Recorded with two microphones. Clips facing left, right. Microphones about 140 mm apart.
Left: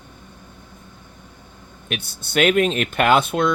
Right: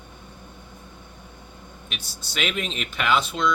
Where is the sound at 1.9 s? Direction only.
55° left (ahead or behind).